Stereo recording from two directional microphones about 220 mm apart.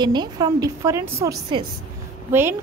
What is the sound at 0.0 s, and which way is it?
A woman's voice, 20° right (ahead or behind).